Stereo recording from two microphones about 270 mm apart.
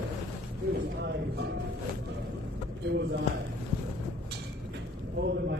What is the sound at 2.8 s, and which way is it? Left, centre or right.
Speech, right.